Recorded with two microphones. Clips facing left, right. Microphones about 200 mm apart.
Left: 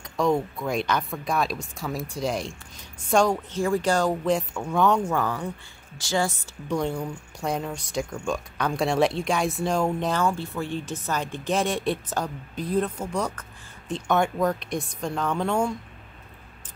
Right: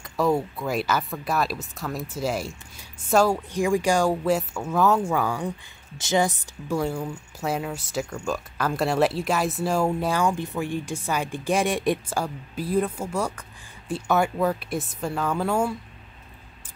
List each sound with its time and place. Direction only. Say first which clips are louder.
0.0 s a woman's voice: even; 5° right (ahead or behind); by 6.3 s 20° right (ahead or behind)
6.7 s speech: right 1 dB; 5° right (ahead or behind)